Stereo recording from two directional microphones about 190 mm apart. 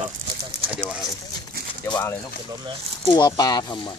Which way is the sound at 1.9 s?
25° left (ahead or behind).